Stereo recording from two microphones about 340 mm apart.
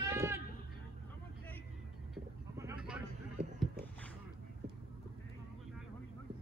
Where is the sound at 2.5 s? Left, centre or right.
Centre.